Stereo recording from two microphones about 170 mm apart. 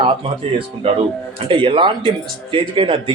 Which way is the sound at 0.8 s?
35° right (ahead or behind).